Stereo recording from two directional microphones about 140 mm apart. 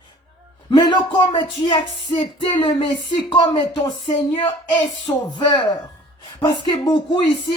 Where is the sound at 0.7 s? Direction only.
35° left (ahead or behind).